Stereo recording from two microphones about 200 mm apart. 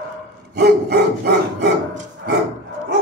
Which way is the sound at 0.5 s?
50° right (ahead or behind).